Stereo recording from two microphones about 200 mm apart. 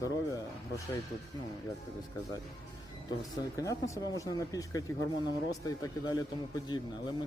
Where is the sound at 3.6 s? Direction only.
15° left (ahead or behind).